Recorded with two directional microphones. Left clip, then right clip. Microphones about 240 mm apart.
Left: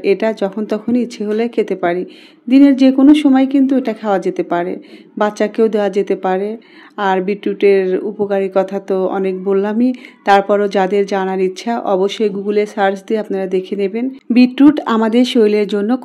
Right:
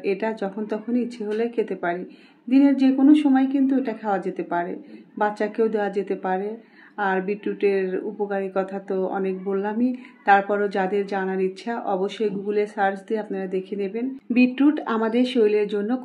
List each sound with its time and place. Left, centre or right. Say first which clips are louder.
0.0 s speech: left 10 dB; left